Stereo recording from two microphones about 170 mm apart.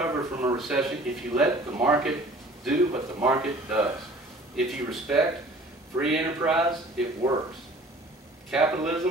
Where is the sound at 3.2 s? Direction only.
5° right (ahead or behind).